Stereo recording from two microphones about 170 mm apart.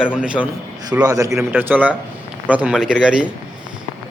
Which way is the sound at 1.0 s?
20° right (ahead or behind).